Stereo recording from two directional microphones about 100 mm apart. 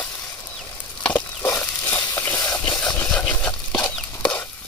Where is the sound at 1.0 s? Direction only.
15° left (ahead or behind).